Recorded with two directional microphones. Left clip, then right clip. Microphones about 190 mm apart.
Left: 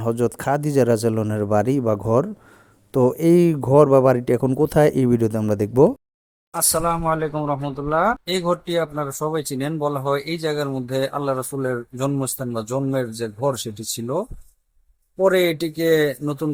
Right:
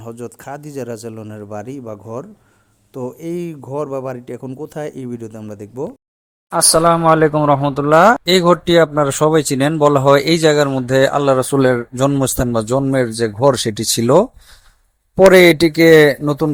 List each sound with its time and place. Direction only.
0.0 s speech: 25° left (ahead or behind)
6.5 s speech: 30° right (ahead or behind)